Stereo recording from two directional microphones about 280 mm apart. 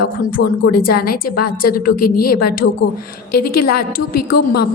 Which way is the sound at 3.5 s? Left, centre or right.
Left.